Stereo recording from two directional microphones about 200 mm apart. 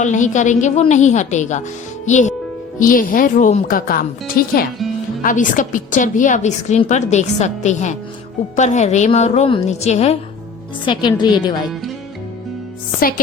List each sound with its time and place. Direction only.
0.0 s a woman's voice: 40° left (ahead or behind)
10.8 s a woman's voice: 20° left (ahead or behind)